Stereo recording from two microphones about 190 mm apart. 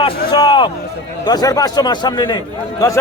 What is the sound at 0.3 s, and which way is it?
A man's voice, 25° left (ahead or behind).